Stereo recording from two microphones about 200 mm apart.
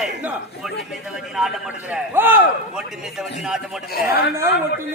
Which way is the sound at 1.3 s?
5° right (ahead or behind).